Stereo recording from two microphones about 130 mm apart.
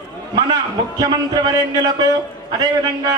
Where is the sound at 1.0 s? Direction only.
30° right (ahead or behind).